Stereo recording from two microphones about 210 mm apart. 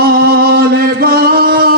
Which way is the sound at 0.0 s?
45° right (ahead or behind).